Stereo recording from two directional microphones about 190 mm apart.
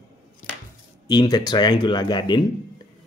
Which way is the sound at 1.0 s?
20° left (ahead or behind).